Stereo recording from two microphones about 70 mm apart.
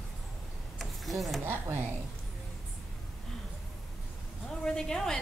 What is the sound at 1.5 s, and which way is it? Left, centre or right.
Speech, right.